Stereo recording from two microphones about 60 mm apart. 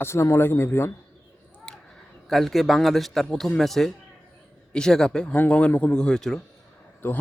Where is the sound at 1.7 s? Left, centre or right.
Centre.